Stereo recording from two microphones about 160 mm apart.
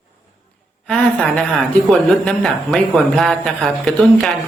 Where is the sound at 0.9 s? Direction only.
5° left (ahead or behind).